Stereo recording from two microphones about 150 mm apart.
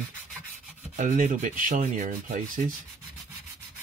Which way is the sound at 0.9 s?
55° right (ahead or behind).